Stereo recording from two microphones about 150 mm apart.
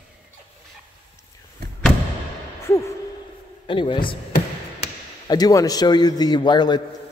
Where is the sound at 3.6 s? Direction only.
35° left (ahead or behind).